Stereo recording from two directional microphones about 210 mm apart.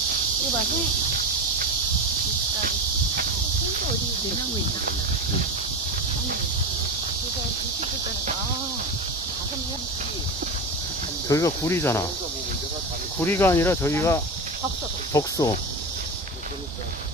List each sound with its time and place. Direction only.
11.2 s speech: 15° left (ahead or behind)
13.2 s speech: 10° left (ahead or behind)